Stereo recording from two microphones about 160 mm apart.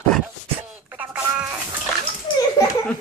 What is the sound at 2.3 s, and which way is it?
Laughter, 30° left (ahead or behind).